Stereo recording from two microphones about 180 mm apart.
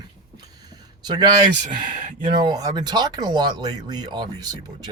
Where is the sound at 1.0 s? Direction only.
25° right (ahead or behind).